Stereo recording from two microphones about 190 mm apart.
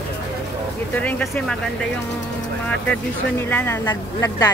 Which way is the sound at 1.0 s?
10° left (ahead or behind).